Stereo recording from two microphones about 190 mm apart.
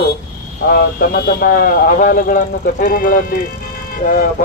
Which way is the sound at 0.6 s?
60° left (ahead or behind).